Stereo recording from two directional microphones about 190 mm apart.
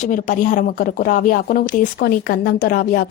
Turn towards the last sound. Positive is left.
turn(degrees=50)  # may be behind; listen again after turning